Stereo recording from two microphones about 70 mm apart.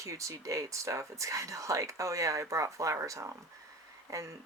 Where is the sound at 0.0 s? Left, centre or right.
Right.